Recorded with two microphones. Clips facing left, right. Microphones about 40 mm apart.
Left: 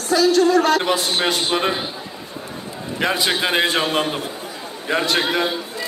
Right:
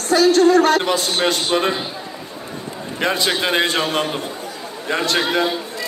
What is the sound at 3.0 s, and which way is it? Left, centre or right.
A man's voice, centre.